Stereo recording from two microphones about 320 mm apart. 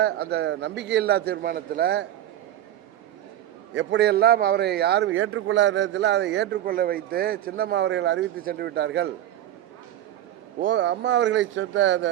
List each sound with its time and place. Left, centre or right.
0.0 s a man's voice: right
3.8 s a man's voice: right
10.6 s a man's voice: right